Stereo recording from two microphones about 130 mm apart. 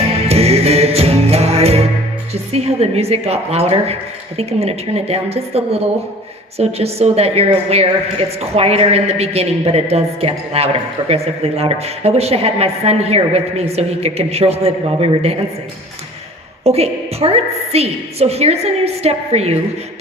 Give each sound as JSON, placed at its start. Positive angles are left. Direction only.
{"t": 0.3, "sound": "music", "side_deg": -50}
{"t": 2.3, "sound": "a woman's voice", "side_deg": -55}
{"t": 16.6, "sound": "a woman's voice", "side_deg": -50}